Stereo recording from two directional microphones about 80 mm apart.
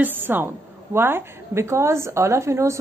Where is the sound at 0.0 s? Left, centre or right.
Right.